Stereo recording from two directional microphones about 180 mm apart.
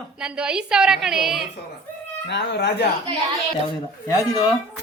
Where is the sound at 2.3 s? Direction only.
70° left (ahead or behind).